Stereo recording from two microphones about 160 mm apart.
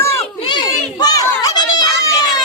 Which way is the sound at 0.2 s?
35° left (ahead or behind).